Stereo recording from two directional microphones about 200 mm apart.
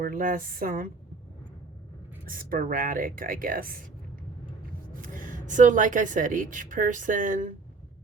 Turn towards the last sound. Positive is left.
turn(degrees=-40)  # may be behind; listen again after turning